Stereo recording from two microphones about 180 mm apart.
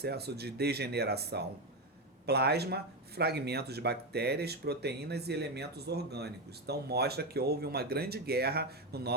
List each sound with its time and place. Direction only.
0.0 s speech: 65° right (ahead or behind)